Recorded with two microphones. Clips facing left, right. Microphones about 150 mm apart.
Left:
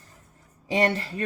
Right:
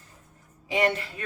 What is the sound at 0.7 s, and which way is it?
Speech, 35° left (ahead or behind).